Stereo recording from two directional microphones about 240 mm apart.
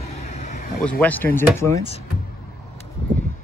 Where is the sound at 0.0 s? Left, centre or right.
Left.